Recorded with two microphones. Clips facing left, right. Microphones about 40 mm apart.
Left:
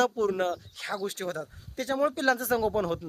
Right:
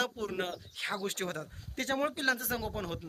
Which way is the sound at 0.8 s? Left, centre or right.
Right.